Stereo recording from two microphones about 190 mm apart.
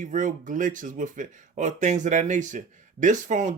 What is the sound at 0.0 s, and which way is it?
Speech, 40° right (ahead or behind).